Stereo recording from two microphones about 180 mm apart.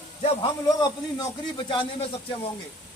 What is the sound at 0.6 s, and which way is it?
A man's voice, 20° left (ahead or behind).